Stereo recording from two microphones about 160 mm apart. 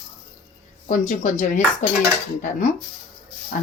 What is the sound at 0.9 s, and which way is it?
Speech, 55° left (ahead or behind).